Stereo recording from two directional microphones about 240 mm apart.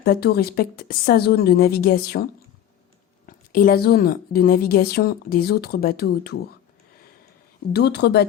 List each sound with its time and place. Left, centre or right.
0.0 s a woman's voice: left
3.2 s a woman's voice: left
7.7 s speech: left